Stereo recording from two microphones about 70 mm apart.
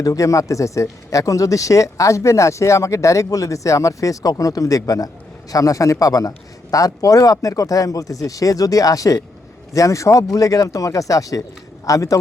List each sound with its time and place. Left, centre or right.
0.0 s a man's voice: left